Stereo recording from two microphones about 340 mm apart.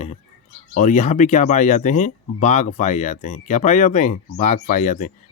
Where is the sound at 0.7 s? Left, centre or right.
Left.